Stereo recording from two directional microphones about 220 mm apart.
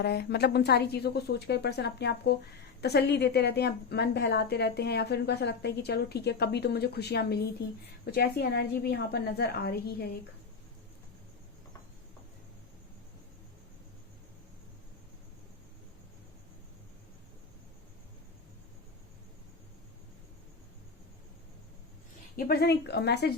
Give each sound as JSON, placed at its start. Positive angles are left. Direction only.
{"t": 0.0, "sound": "a woman's voice", "side_deg": 50}
{"t": 22.4, "sound": "a woman's voice", "side_deg": 45}